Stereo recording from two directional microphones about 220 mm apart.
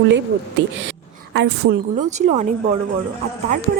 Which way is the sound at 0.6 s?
55° right (ahead or behind).